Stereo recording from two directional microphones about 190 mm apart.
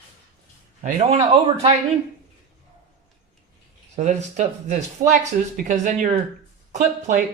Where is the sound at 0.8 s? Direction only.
30° right (ahead or behind).